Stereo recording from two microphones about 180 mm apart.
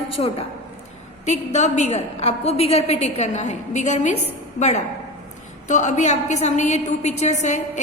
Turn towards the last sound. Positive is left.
turn(degrees=40)  # may be behind; listen again after turning